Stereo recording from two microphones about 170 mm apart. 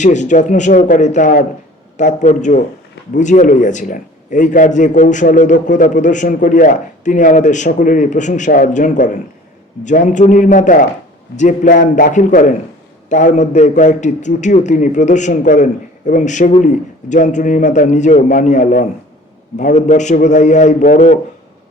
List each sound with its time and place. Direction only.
0.0 s a man's voice: 45° left (ahead or behind)